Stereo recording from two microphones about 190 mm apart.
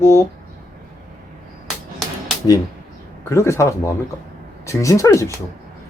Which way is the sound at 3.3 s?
15° left (ahead or behind).